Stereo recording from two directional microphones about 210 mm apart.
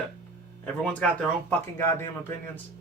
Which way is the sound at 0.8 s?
5° left (ahead or behind).